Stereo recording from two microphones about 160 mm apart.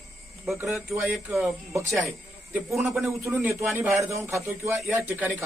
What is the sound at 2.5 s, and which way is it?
A man's voice, 15° right (ahead or behind).